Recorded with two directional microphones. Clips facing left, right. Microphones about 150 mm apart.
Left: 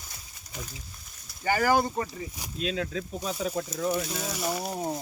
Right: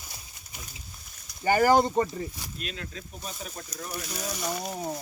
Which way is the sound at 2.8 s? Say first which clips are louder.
Left 8 dB; 90° left.